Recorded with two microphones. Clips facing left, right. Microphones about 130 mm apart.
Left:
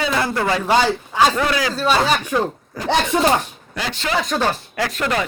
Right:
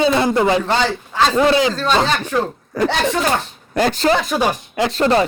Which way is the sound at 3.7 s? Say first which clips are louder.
Right 10 dB; 45° right (ahead or behind).